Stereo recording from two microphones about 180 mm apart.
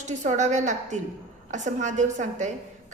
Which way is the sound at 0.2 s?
40° right (ahead or behind).